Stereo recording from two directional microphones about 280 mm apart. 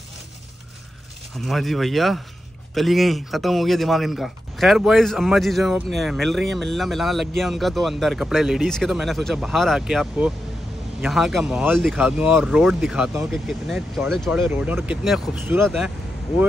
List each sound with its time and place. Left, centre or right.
1.4 s a man's voice: centre